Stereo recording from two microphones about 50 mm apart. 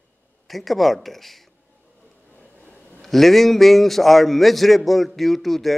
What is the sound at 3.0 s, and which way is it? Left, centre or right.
A man's voice, centre.